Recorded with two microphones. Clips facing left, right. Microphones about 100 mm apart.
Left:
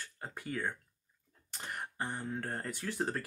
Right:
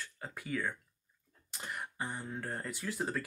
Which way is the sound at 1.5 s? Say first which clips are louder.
Even; 45° left (ahead or behind).